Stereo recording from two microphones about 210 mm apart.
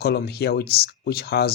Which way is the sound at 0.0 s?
50° left (ahead or behind).